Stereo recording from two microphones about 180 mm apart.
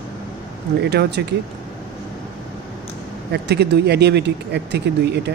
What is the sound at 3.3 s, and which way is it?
Speech, 65° right (ahead or behind).